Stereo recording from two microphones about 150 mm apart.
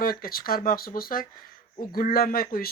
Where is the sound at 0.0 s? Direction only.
75° left (ahead or behind).